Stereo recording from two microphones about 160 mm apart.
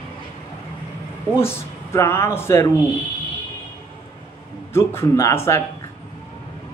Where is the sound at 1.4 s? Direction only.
15° left (ahead or behind).